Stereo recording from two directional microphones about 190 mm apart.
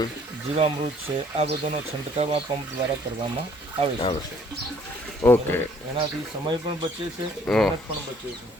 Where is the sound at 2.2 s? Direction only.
30° right (ahead or behind).